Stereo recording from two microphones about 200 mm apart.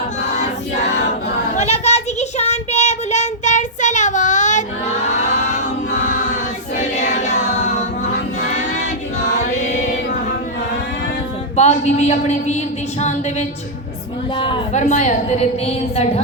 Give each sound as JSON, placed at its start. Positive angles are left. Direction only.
{"t": 0.2, "sound": "choir", "side_deg": 35}
{"t": 1.5, "sound": "child singing", "side_deg": 35}
{"t": 6.7, "sound": "choir", "side_deg": 35}
{"t": 9.2, "sound": "music", "side_deg": 35}
{"t": 11.5, "sound": "a woman's voice", "side_deg": 35}
{"t": 14.3, "sound": "a woman's voice", "side_deg": 25}